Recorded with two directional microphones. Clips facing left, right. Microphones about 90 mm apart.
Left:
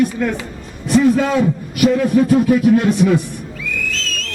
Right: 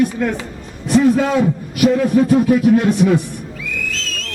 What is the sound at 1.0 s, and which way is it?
A man's voice, 25° right (ahead or behind).